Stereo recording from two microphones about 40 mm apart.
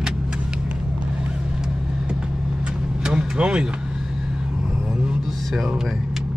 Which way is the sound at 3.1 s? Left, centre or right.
Right.